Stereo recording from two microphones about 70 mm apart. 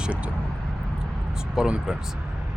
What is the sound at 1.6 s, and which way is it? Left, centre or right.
Speech, centre.